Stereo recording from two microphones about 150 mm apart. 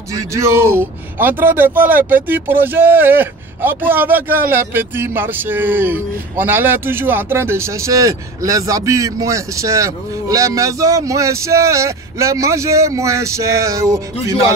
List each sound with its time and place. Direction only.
0.3 s speech: 20° right (ahead or behind)